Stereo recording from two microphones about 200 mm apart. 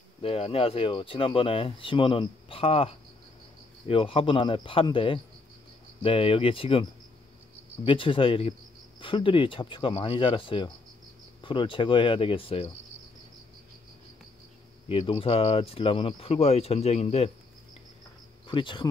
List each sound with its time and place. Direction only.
0.2 s speech: 30° left (ahead or behind)
14.9 s speech: 30° left (ahead or behind)
18.5 s speech: 25° left (ahead or behind)